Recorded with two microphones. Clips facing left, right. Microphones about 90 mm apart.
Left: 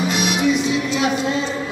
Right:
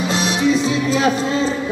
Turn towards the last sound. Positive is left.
turn(degrees=-35)  # may be behind; listen again after turning